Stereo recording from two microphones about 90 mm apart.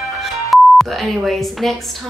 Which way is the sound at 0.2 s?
Centre (ahead or behind).